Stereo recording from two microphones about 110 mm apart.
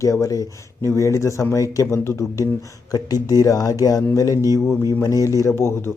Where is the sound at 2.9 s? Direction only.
35° left (ahead or behind).